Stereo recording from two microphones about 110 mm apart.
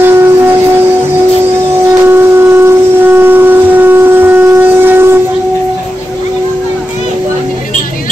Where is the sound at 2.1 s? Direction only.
20° right (ahead or behind).